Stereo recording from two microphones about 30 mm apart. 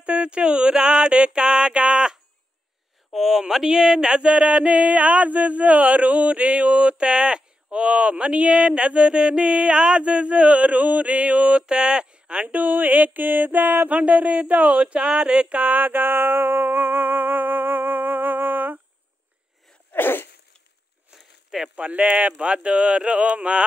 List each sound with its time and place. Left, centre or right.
0.0 s speech: right
1.4 s music: right
3.1 s a sound: centre; by 7.1 s right
7.1 s speech: right
10.6 s a sound: right
11.6 s a sound: right
12.5 s a sound: right
14.0 s speech: right
14.8 s speech: right
15.6 s music: right
21.5 s speech: right
21.8 s speech: right
22.4 s speech: right